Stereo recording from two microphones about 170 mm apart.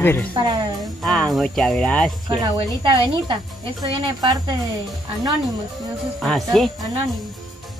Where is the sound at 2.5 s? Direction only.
30° right (ahead or behind).